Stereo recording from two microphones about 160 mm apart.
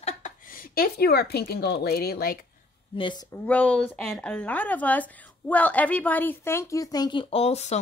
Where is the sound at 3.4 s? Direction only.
10° left (ahead or behind).